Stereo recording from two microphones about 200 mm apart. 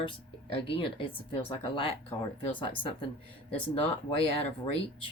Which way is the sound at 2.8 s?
25° left (ahead or behind).